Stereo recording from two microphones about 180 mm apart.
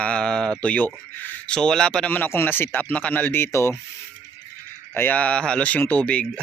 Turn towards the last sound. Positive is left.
turn(degrees=5)  # may be behind; listen again after turning